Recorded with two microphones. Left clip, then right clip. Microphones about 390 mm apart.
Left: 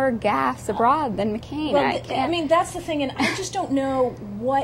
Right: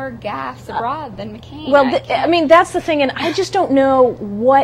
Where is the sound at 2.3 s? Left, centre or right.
Right.